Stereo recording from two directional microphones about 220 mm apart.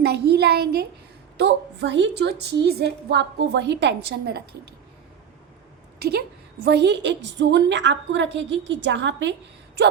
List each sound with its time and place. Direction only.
0.0 s a sound: 50° right (ahead or behind)
1.4 s a woman's voice: 50° right (ahead or behind)
6.7 s a woman's voice: 50° right (ahead or behind)